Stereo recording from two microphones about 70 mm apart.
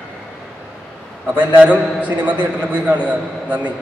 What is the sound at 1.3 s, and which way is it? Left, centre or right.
A man's voice, right.